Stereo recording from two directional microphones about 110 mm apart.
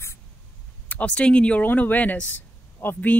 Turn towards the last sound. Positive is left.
turn(degrees=15)  # may be behind; listen again after turning